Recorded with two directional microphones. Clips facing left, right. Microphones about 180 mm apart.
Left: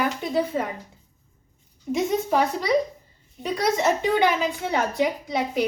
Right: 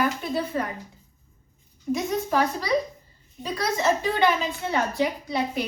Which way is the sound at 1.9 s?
20° left (ahead or behind).